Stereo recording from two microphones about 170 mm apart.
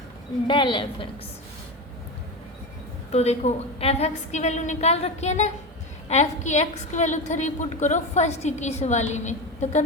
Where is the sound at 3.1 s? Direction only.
40° left (ahead or behind).